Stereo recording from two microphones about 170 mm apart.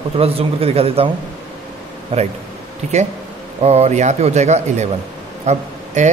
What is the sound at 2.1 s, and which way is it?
A woman's voice, 30° right (ahead or behind).